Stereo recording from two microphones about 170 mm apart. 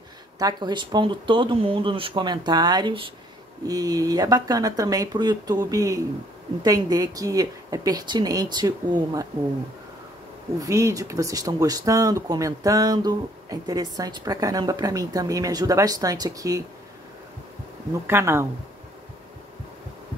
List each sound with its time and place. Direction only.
0.4 s speech: 25° right (ahead or behind)
10.6 s speech: 20° right (ahead or behind)
18.0 s speech: 15° right (ahead or behind)